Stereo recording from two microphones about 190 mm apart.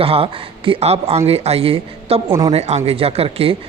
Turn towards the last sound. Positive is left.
turn(degrees=-30)  # may be behind; listen again after turning